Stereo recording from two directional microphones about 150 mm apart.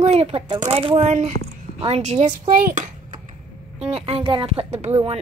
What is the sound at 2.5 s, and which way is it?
Speech, 65° right (ahead or behind).